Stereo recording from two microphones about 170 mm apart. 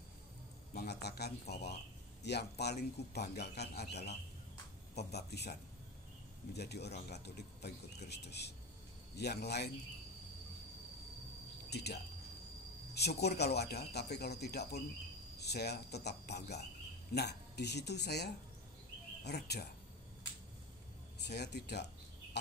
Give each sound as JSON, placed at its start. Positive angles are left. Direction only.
{"t": 0.7, "sound": "a man's voice", "side_deg": 70}
{"t": 11.7, "sound": "speech", "side_deg": 75}
{"t": 21.3, "sound": "speech", "side_deg": 80}